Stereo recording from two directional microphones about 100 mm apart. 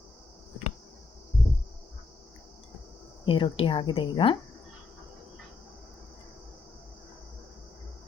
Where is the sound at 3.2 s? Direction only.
55° left (ahead or behind).